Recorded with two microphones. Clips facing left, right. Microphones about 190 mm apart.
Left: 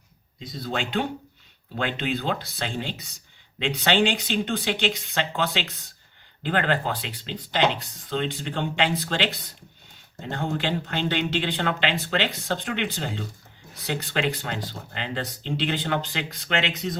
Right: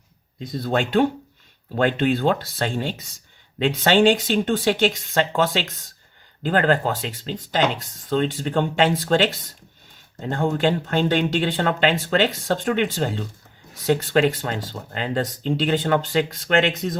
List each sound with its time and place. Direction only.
0.3 s speech: 55° right (ahead or behind)